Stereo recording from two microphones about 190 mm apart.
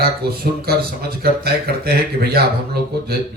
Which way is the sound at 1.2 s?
55° right (ahead or behind).